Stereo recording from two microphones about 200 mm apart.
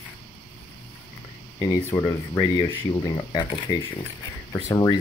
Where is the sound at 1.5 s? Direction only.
15° left (ahead or behind).